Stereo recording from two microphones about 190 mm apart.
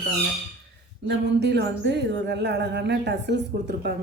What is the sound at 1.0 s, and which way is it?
Speech, 65° right (ahead or behind).